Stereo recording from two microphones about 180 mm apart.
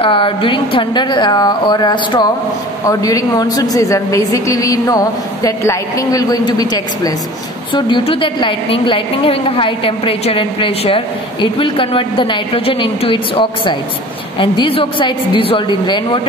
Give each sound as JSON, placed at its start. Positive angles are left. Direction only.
{"t": 0.0, "sound": "a woman's voice", "side_deg": 30}